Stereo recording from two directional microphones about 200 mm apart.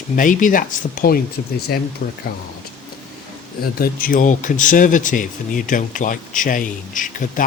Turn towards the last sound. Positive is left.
turn(degrees=40)  # may be behind; listen again after turning